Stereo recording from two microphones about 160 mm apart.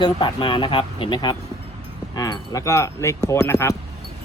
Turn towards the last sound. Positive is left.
turn(degrees=15)  # may be behind; listen again after turning